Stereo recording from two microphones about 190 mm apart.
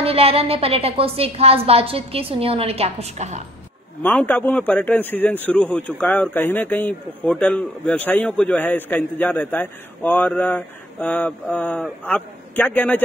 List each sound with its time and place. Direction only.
0.0 s a woman's voice: 30° right (ahead or behind)
4.0 s a man's voice: 10° left (ahead or behind)